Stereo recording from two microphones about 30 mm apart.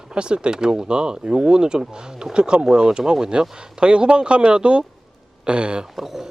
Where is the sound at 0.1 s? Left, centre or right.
Right.